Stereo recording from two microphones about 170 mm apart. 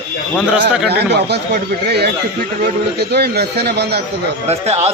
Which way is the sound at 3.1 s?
70° right (ahead or behind).